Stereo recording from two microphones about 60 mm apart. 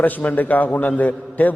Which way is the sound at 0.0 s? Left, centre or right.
Left.